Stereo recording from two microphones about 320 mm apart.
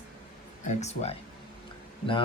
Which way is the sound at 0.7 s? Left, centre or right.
Left.